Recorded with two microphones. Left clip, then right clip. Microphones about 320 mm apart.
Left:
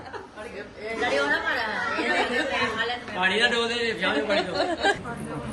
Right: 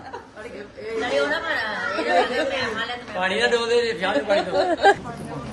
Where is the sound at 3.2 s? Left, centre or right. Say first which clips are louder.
Right 2 dB; right.